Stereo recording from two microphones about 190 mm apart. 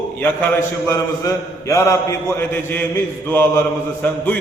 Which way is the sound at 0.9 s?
15° left (ahead or behind).